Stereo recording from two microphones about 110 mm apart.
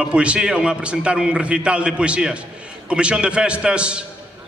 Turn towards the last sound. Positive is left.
turn(degrees=-10)  # may be behind; listen again after turning